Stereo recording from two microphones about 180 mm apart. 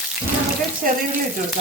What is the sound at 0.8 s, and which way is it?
Speech, 50° right (ahead or behind).